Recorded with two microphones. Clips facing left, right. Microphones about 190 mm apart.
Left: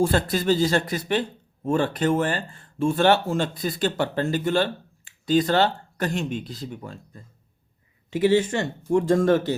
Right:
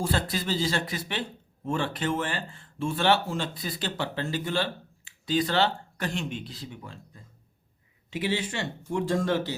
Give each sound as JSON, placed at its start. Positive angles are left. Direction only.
{"t": 0.0, "sound": "speech", "side_deg": 50}